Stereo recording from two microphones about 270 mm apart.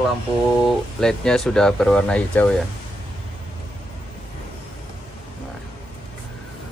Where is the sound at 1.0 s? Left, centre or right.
Centre.